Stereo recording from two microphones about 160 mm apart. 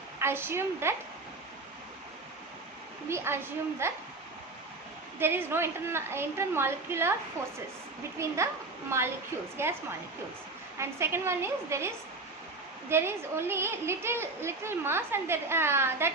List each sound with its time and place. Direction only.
0.2 s a woman's voice: 15° right (ahead or behind)
3.1 s a woman's voice: 15° right (ahead or behind)
5.2 s a woman's voice: 15° right (ahead or behind)
10.8 s a woman's voice: 15° right (ahead or behind)